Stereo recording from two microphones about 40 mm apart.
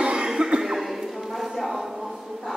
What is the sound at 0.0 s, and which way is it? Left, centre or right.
Cough, right.